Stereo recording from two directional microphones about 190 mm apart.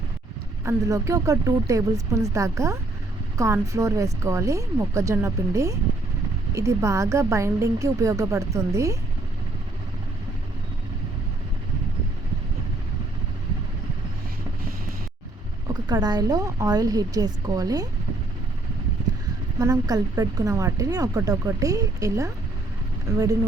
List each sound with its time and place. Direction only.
0.6 s speech: 15° right (ahead or behind)
15.6 s speech: 20° right (ahead or behind)
19.5 s speech: 20° right (ahead or behind)